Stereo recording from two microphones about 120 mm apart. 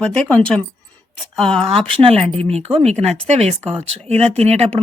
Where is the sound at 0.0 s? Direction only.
10° left (ahead or behind).